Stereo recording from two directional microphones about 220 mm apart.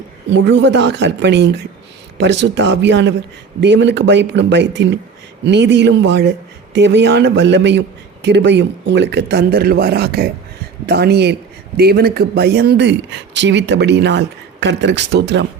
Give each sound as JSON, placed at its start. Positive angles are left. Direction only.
{"t": 0.3, "sound": "speech", "side_deg": -55}